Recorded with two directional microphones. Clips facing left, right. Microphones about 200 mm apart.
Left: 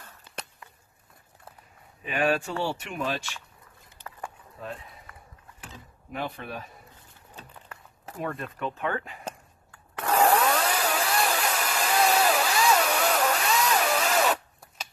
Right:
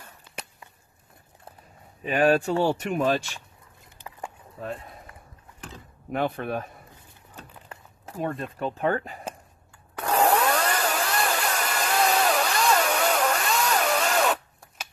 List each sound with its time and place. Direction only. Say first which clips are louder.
2.0 s speech: right 5 dB; 40° right (ahead or behind)
6.1 s speech: right 7 dB; 55° right (ahead or behind)
8.2 s speech: right 3 dB; 30° right (ahead or behind)
10.0 s chainsaw: even; centre (ahead or behind)